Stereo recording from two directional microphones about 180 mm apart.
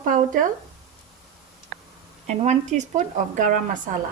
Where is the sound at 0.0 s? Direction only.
50° right (ahead or behind).